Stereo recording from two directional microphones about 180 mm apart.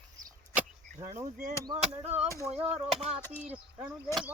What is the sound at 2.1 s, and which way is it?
Speech, 10° right (ahead or behind).